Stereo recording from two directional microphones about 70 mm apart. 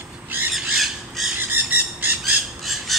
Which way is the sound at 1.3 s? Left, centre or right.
Right.